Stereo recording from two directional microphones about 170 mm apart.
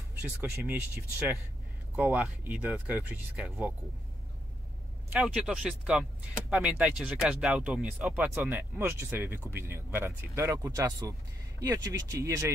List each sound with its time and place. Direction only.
0.4 s speech: 10° right (ahead or behind)
2.0 s speech: 10° right (ahead or behind)
5.1 s speech: 5° right (ahead or behind)